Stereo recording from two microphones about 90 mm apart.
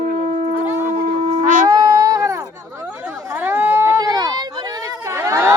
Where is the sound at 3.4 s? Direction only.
25° right (ahead or behind).